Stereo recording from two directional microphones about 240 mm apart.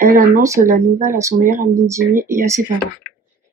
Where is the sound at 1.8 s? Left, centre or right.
Centre.